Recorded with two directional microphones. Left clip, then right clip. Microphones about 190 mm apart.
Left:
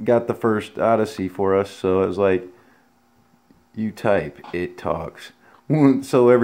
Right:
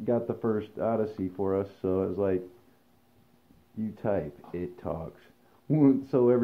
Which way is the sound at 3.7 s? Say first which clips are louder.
Left 10 dB; 60° left (ahead or behind).